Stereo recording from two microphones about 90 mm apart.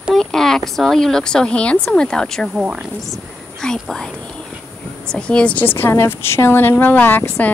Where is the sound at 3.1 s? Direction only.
5° left (ahead or behind).